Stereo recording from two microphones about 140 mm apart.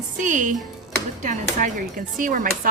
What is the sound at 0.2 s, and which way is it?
Speech, 65° right (ahead or behind).